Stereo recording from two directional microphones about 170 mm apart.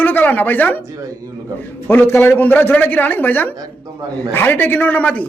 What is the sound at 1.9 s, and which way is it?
Speech, 15° left (ahead or behind).